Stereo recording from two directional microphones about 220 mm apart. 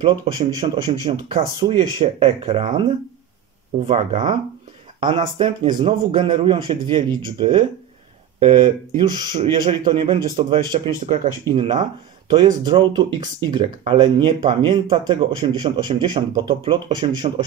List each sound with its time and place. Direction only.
0.0 s speech: 20° right (ahead or behind)